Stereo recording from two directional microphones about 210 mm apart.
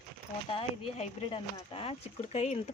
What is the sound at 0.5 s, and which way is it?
Speech, 25° left (ahead or behind).